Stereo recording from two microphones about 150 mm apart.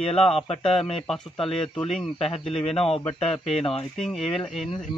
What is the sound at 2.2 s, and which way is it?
Speech, 40° left (ahead or behind).